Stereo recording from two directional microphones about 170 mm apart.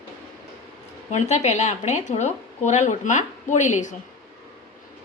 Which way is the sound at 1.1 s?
40° left (ahead or behind).